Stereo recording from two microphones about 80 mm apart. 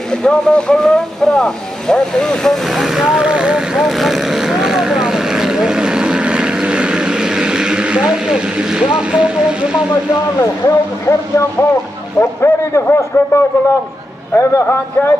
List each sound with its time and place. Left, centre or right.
0.1 s speech: centre
3.7 s vehicle: centre
8.9 s speech: centre
10.4 s a man's voice: left